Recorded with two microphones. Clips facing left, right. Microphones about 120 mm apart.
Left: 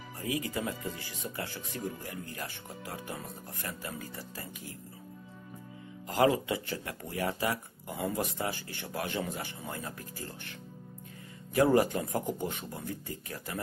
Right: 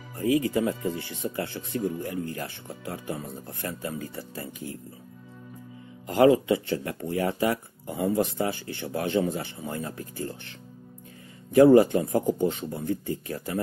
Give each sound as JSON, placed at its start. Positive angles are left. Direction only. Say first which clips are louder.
{"t": 0.2, "sound": "speech", "louder": "right 10 dB", "side_deg": -30}
{"t": 6.0, "sound": "speech", "louder": "right 7 dB", "side_deg": -30}
{"t": 11.5, "sound": "speech", "louder": "right 9 dB", "side_deg": -25}